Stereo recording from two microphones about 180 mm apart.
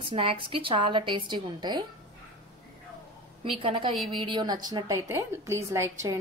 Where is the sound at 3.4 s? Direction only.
30° right (ahead or behind).